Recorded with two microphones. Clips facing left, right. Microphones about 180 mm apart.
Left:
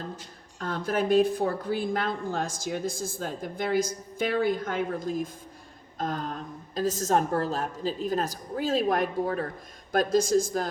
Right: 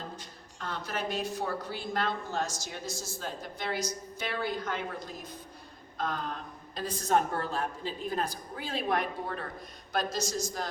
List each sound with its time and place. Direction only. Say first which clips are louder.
0.6 s a woman's voice: left 7 dB; 50° left (ahead or behind)